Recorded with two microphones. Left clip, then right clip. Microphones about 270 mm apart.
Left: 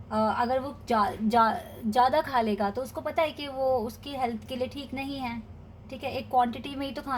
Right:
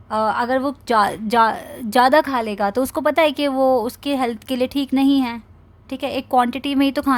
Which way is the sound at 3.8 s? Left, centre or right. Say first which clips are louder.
Right 10 dB; right.